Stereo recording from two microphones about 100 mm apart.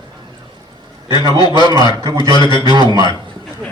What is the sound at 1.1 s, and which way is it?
A man's voice, 45° left (ahead or behind).